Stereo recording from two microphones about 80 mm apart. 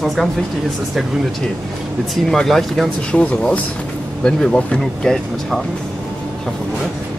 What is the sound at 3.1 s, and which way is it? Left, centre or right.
Speech, centre.